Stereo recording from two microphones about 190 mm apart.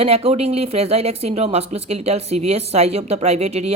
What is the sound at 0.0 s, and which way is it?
Speech, 30° right (ahead or behind).